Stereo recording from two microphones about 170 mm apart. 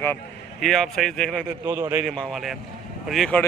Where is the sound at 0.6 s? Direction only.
Centre (ahead or behind).